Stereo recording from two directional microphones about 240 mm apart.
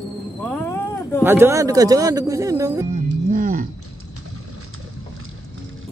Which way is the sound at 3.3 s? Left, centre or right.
Right.